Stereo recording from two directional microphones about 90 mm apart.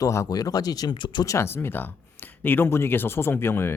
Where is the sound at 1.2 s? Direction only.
30° left (ahead or behind).